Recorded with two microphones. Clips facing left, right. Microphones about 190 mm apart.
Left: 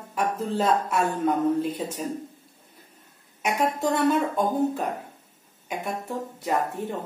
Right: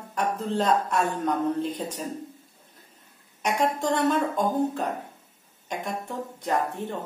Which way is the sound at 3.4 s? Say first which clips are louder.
Even; 10° left (ahead or behind).